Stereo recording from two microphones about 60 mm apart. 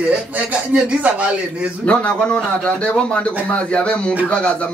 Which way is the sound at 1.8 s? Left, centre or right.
Left.